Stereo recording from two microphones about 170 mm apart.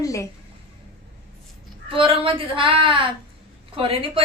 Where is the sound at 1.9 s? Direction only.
30° right (ahead or behind).